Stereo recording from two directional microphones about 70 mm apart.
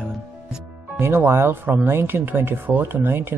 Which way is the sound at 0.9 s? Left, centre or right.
Right.